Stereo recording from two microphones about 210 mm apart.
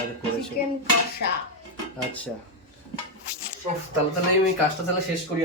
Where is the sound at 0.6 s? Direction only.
45° left (ahead or behind).